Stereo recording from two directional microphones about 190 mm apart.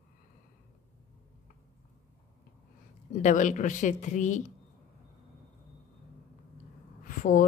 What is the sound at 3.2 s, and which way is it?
Speech, 40° left (ahead or behind).